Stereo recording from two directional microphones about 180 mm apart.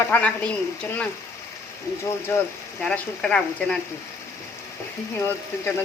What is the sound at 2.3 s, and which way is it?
Speech, 10° left (ahead or behind).